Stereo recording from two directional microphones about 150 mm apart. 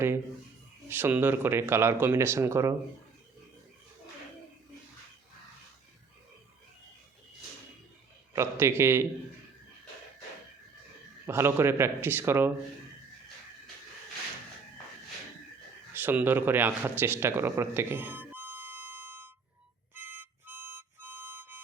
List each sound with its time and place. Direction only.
0.9 s speech: 15° right (ahead or behind)
8.3 s a man's voice: 20° right (ahead or behind)
11.3 s speech: 15° right (ahead or behind)
16.0 s a man's voice: 15° right (ahead or behind)
19.9 s harmonica: 15° right (ahead or behind)